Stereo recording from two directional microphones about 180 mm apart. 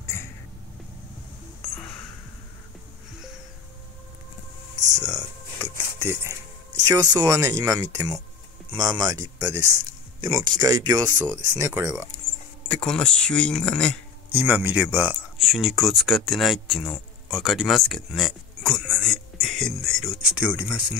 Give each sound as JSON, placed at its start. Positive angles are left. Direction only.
{"t": 0.0, "sound": "a sound", "side_deg": 15}
{"t": 4.7, "sound": "a sound", "side_deg": -45}
{"t": 5.6, "sound": "dishes", "side_deg": -15}
{"t": 6.9, "sound": "speech", "side_deg": -20}
{"t": 12.6, "sound": "speech", "side_deg": 5}
{"t": 14.3, "sound": "speech", "side_deg": -10}
{"t": 15.3, "sound": "speech", "side_deg": 0}